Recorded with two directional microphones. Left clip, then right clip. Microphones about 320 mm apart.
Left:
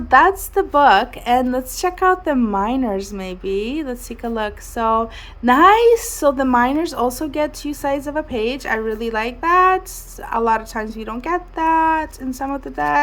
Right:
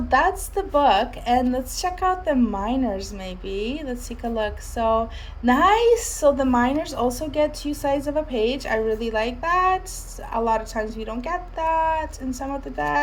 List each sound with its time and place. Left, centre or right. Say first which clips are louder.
0.1 s a woman's voice: left 7 dB; centre